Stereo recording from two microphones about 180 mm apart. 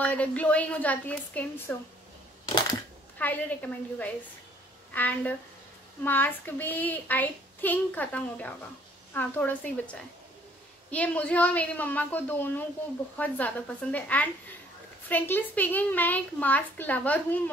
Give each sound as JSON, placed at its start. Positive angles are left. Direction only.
{"t": 0.0, "sound": "speech", "side_deg": 10}
{"t": 2.4, "sound": "a sound", "side_deg": 25}
{"t": 3.2, "sound": "speech", "side_deg": 10}
{"t": 10.9, "sound": "speech", "side_deg": 5}